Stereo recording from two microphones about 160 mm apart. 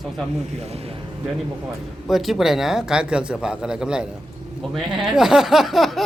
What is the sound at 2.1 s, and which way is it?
Speech, centre (ahead or behind).